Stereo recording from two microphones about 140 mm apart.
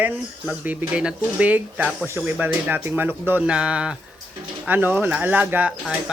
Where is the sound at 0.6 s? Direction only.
10° right (ahead or behind).